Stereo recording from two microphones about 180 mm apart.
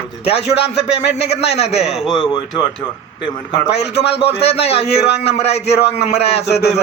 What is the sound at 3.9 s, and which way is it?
A man's voice, 70° left (ahead or behind).